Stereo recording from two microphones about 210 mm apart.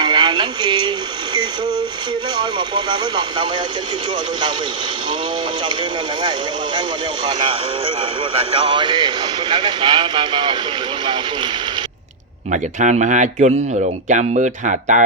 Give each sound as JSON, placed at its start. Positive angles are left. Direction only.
{"t": 0.0, "sound": "a sound", "side_deg": -20}
{"t": 2.3, "sound": "speech", "side_deg": -20}
{"t": 8.2, "sound": "speech", "side_deg": -25}
{"t": 12.5, "sound": "speech", "side_deg": -35}